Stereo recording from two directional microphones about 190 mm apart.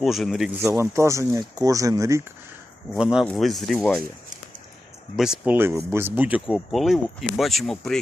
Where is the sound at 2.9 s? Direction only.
5° right (ahead or behind).